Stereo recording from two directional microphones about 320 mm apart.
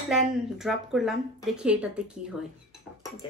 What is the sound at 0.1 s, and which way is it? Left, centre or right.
Speech, centre.